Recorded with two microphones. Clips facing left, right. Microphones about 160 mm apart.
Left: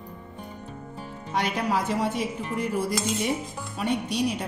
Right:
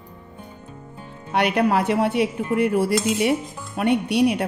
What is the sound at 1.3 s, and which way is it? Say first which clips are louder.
Dishes: right 7 dB; 65° right (ahead or behind).